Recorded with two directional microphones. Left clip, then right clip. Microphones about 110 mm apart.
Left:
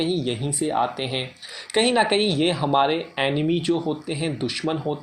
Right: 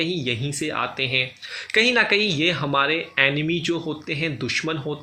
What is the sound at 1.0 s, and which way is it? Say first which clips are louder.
Speech: right 5 dB; 45° left (ahead or behind).